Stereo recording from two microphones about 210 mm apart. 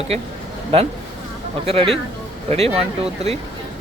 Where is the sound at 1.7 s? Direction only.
25° right (ahead or behind).